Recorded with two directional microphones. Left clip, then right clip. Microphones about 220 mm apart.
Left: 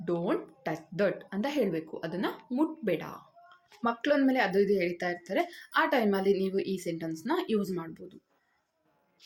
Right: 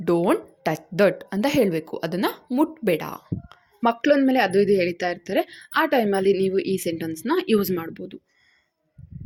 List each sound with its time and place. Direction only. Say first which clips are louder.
0.0 s speech: right 10 dB; 50° right (ahead or behind)